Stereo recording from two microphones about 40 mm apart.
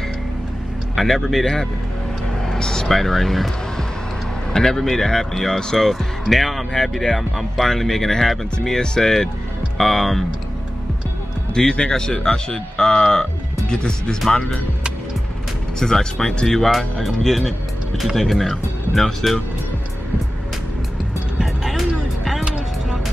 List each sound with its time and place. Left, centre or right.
0.9 s speech: centre
2.4 s vehicle: centre
2.9 s speech: centre
5.9 s speech: centre
11.5 s a man's voice: centre
15.8 s speech: centre
21.4 s music: centre